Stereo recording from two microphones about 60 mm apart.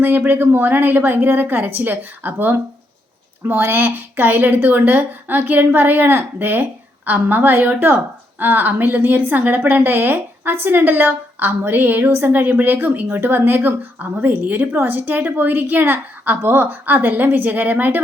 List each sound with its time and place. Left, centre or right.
0.0 s a woman's voice: right